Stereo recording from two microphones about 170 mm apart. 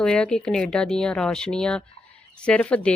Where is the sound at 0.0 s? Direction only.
5° left (ahead or behind).